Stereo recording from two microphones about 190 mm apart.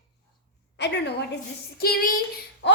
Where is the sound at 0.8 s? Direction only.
65° left (ahead or behind).